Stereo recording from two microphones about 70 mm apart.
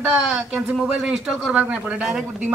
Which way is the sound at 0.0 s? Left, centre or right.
Centre.